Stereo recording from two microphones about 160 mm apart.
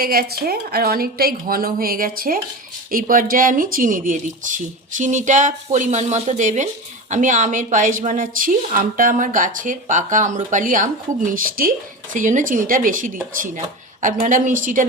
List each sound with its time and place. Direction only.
0.0 s a woman's voice: 70° right (ahead or behind)